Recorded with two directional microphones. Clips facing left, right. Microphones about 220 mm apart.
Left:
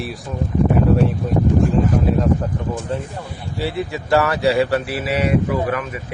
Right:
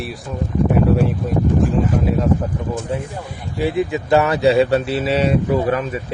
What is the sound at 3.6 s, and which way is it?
A man's voice, 20° right (ahead or behind).